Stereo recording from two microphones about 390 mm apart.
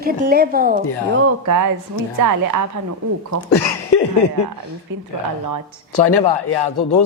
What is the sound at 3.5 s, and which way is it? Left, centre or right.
Speech, left.